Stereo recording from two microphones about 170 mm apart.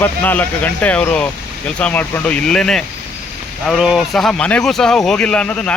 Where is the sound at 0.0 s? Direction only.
10° left (ahead or behind).